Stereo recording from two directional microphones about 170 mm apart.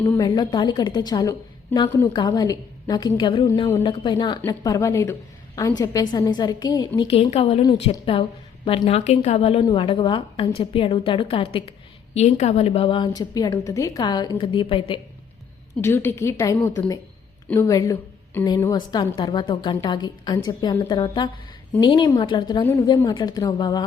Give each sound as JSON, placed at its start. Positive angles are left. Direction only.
{"t": 0.0, "sound": "a woman's voice", "side_deg": 15}
{"t": 0.3, "sound": "a woman's voice", "side_deg": 30}
{"t": 7.1, "sound": "a woman's voice", "side_deg": 35}
{"t": 12.1, "sound": "a woman's voice", "side_deg": 40}
{"t": 15.8, "sound": "a woman's voice", "side_deg": 15}
{"t": 22.6, "sound": "a woman's voice", "side_deg": 15}